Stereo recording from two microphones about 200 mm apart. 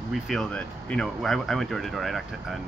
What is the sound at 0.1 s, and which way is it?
Speech, centre (ahead or behind).